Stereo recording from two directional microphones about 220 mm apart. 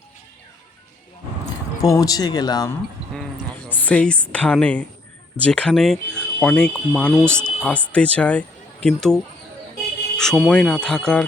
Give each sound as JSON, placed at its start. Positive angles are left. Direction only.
{"t": 1.8, "sound": "speech", "side_deg": 15}
{"t": 3.8, "sound": "speech", "side_deg": 5}